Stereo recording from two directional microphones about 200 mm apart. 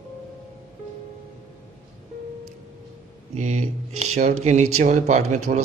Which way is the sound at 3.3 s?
35° right (ahead or behind).